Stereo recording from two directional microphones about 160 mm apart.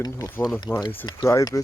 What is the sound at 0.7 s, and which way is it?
Speech, 5° right (ahead or behind).